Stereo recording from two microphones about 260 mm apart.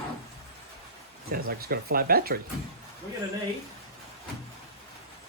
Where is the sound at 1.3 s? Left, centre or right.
Right.